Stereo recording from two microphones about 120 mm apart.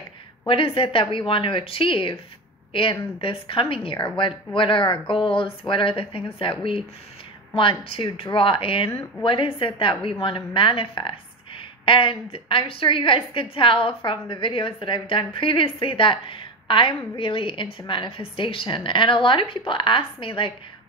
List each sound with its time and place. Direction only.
0.5 s a woman's voice: 50° left (ahead or behind)
7.5 s a woman's voice: 45° left (ahead or behind)